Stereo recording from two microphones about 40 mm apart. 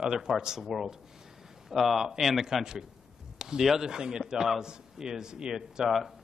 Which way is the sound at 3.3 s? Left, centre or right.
Centre.